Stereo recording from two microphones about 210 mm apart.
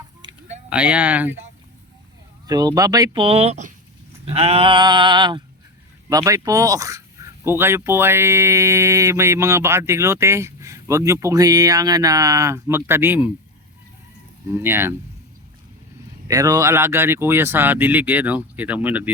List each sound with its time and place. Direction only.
0.2 s chicken: 20° right (ahead or behind)
0.7 s speech: 5° right (ahead or behind)
2.5 s speech: 15° right (ahead or behind)
4.4 s a sound: 25° right (ahead or behind)
6.1 s speech: 15° right (ahead or behind)
14.5 s speech: 10° right (ahead or behind)
16.3 s speech: 15° right (ahead or behind)